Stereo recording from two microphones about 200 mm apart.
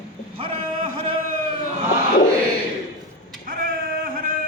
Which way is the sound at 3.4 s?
45° right (ahead or behind).